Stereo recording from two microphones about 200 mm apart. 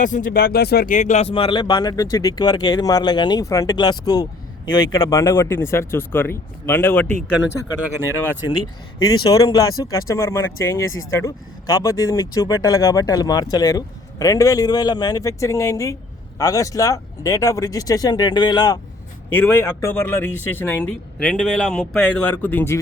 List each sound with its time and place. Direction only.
0.0 s speech: 40° left (ahead or behind); by 7.3 s 10° left (ahead or behind)
9.0 s speech: 20° left (ahead or behind)